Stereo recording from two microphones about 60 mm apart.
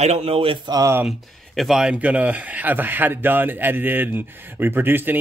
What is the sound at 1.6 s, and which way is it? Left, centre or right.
Speech, centre.